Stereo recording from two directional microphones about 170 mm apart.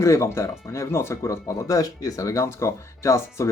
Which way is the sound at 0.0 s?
15° left (ahead or behind).